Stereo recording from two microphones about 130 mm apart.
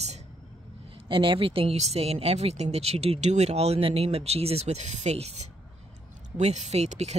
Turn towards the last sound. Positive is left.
turn(degrees=-55)  # may be behind; listen again after turning